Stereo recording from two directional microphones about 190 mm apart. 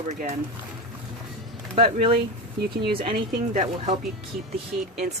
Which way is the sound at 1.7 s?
30° right (ahead or behind).